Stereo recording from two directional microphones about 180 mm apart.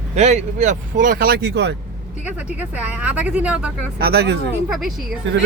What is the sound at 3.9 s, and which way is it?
Speech, 60° right (ahead or behind).